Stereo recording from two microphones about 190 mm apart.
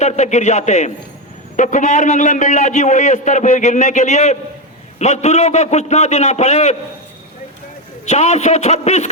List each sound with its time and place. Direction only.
0.0 s a man's voice: 35° left (ahead or behind)
8.0 s a man's voice: 35° left (ahead or behind)